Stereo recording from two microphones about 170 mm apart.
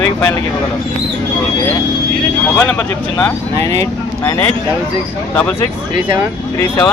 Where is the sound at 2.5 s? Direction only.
10° left (ahead or behind).